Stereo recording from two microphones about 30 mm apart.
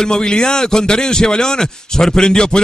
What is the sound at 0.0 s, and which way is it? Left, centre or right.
Speech, left.